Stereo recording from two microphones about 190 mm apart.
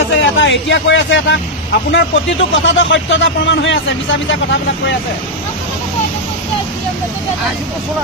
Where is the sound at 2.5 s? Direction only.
75° left (ahead or behind).